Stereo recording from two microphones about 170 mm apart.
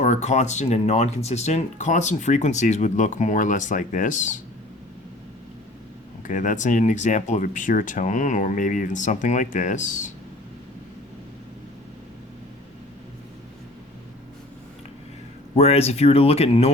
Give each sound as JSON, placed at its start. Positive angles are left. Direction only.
{"t": 0.0, "sound": "speech", "side_deg": 45}
{"t": 6.2, "sound": "speech", "side_deg": 50}
{"t": 15.5, "sound": "speech", "side_deg": 40}